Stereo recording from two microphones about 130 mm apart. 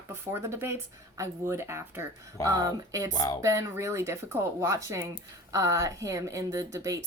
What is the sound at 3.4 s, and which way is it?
A woman's voice, 25° right (ahead or behind).